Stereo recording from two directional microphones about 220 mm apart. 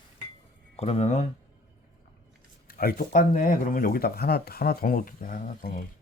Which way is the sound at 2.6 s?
45° left (ahead or behind).